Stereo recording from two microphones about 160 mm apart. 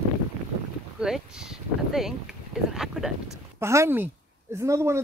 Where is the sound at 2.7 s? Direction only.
Centre (ahead or behind).